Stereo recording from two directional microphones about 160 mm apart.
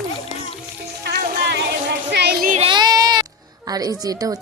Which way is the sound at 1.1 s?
90° right.